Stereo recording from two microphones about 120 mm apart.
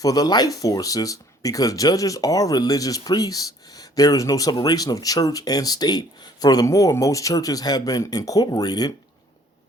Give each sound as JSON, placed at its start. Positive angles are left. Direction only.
{"t": 0.0, "sound": "speech", "side_deg": 30}